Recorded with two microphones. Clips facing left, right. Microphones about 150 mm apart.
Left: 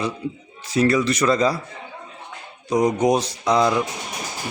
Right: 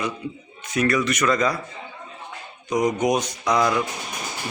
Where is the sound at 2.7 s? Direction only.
30° left (ahead or behind).